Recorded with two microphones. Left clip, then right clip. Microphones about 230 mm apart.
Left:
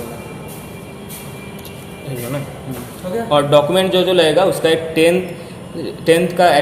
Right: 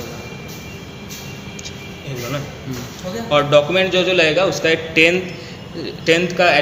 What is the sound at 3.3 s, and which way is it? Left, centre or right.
A man's voice, left.